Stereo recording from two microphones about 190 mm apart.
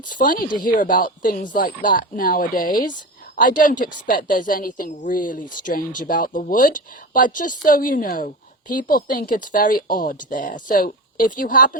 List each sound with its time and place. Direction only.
0.1 s speech: 45° left (ahead or behind)